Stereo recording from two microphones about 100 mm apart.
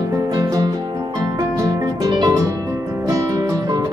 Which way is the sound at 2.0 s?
40° right (ahead or behind).